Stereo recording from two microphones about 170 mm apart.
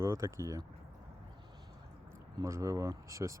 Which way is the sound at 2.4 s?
15° right (ahead or behind).